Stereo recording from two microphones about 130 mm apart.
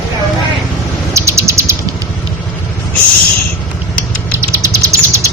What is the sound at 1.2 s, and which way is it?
Bird, 20° right (ahead or behind).